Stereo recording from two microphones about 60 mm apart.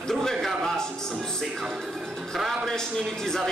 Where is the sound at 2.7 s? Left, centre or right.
Centre.